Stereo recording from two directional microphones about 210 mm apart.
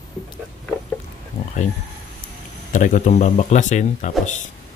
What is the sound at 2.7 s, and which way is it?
Speech, 35° left (ahead or behind).